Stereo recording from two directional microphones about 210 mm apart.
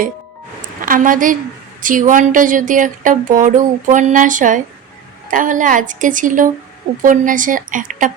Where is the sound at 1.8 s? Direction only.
40° right (ahead or behind).